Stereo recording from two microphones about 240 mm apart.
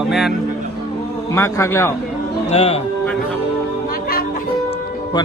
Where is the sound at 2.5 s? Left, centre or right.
Left.